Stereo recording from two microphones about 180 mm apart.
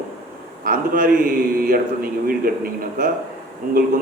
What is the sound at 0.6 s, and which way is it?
A man's voice, 45° right (ahead or behind).